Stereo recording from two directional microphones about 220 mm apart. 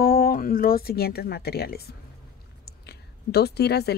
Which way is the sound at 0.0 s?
40° left (ahead or behind).